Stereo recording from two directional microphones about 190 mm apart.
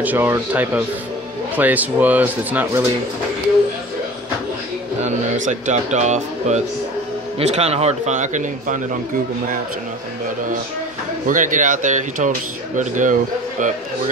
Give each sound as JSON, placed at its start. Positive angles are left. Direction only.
{"t": 0.0, "sound": "speech", "side_deg": -10}
{"t": 5.0, "sound": "a man's voice", "side_deg": -40}
{"t": 11.2, "sound": "a man's voice", "side_deg": -45}